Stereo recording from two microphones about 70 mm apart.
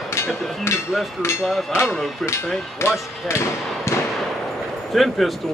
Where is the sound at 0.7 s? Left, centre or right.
Left.